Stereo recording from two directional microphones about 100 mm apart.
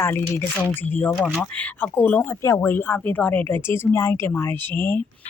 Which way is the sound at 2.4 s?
25° left (ahead or behind).